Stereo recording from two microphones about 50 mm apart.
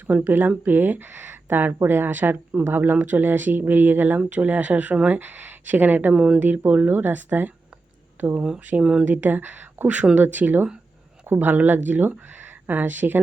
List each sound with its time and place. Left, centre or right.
0.3 s speech: right
6.1 s speech: centre
6.7 s speech: right
8.8 s speech: centre
9.0 s speech: right